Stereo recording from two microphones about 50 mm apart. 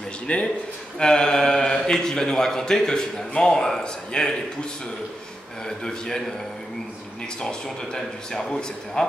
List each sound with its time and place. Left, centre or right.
0.3 s a man's voice: left
5.7 s a man's voice: centre
7.3 s a man's voice: centre